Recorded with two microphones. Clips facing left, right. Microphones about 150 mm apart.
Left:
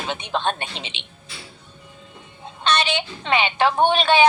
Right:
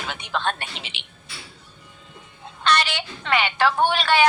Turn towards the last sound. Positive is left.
turn(degrees=20)  # may be behind; listen again after turning